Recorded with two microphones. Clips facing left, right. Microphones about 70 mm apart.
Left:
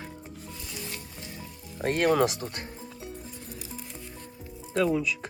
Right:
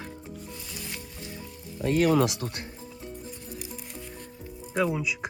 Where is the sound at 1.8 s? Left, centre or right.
Left.